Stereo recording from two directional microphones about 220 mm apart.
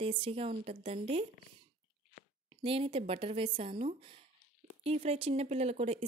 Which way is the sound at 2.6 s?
25° right (ahead or behind).